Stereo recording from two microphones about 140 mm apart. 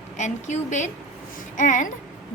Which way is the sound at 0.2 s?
55° left (ahead or behind).